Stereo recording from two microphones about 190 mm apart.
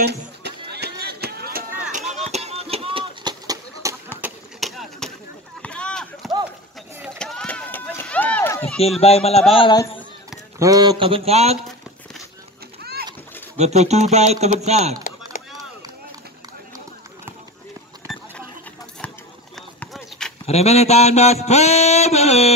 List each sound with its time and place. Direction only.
0.0 s run: 60° right (ahead or behind); by 2.2 s 40° right (ahead or behind)
2.3 s a sound: 35° right (ahead or behind)
4.2 s a sound: centre (ahead or behind)
7.0 s run: centre (ahead or behind)
9.0 s mantra: 30° left (ahead or behind)
9.5 s a man's voice: 25° left (ahead or behind)
10.6 s speech: 20° right (ahead or behind)
13.6 s speech: 35° right (ahead or behind)
19.8 s a sound: 5° left (ahead or behind)
20.4 s mantra: 35° left (ahead or behind)